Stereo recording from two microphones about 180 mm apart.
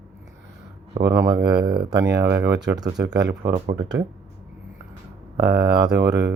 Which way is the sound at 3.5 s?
35° right (ahead or behind).